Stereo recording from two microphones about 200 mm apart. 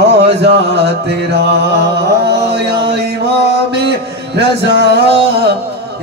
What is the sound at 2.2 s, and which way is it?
Mantra, 55° right (ahead or behind).